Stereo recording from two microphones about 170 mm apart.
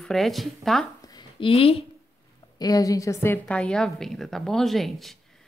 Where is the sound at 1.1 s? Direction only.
25° left (ahead or behind).